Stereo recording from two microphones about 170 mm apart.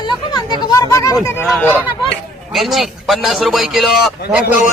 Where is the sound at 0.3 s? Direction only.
20° left (ahead or behind).